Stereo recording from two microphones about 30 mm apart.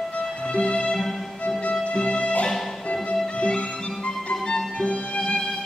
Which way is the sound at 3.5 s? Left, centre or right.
Left.